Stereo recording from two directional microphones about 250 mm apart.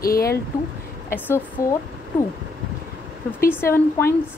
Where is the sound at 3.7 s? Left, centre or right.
Centre.